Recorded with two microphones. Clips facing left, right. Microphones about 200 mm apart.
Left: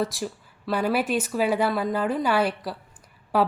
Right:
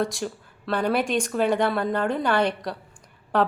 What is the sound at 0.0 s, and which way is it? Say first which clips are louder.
Speech: right 1 dB; centre (ahead or behind).